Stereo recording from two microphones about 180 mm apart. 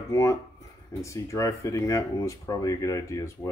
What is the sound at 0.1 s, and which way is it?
Speech, 15° left (ahead or behind).